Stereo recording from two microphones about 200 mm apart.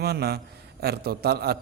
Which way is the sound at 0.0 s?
50° right (ahead or behind).